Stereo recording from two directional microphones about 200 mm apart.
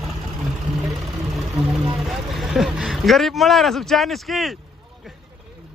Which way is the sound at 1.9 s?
Centre (ahead or behind).